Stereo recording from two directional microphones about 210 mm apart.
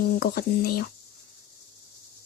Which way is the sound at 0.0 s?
45° left (ahead or behind).